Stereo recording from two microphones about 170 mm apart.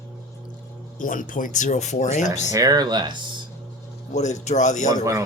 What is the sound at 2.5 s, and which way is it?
Speech, 20° right (ahead or behind).